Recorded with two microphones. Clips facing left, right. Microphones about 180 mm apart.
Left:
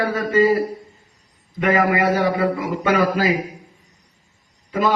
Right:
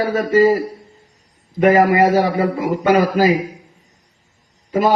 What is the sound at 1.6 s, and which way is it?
A man's voice, 40° right (ahead or behind).